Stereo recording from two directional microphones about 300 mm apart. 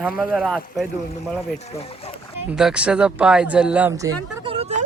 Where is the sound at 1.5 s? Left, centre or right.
Left.